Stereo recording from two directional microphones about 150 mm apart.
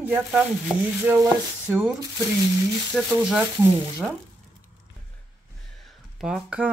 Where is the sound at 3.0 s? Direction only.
5° right (ahead or behind).